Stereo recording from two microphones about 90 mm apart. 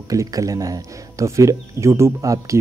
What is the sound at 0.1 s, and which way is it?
Speech, 40° right (ahead or behind).